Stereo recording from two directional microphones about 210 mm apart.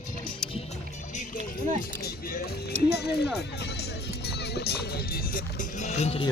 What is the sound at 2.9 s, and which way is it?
Speech, 50° left (ahead or behind).